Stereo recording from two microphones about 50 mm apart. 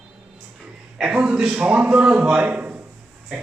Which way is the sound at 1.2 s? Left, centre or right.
Right.